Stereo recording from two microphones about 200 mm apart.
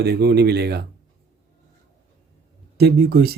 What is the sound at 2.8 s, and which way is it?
Speech, 50° right (ahead or behind).